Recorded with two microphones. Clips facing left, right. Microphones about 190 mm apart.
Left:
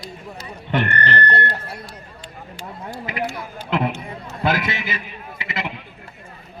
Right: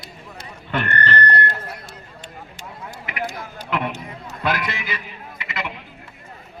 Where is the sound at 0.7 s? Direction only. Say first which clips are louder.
Left 2 dB; 20° left (ahead or behind).